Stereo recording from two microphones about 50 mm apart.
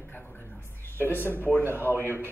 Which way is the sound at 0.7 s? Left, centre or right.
Left.